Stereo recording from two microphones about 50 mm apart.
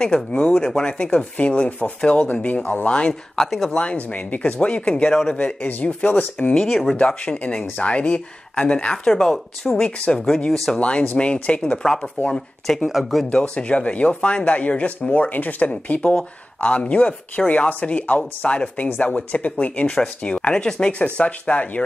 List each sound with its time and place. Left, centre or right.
0.0 s speech: centre
0.8 s speech: left
2.3 s speech: left
2.6 s speech: left
2.9 s speech: centre
3.4 s speech: centre
3.7 s speech: left
6.7 s speech: centre
7.0 s speech: centre
8.9 s speech: centre
10.5 s speech: centre
10.8 s speech: left
12.8 s speech: centre
13.3 s speech: left